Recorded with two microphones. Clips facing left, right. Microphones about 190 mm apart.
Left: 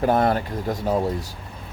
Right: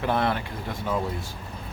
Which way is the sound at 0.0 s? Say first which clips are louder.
Left 6 dB; 40° left (ahead or behind).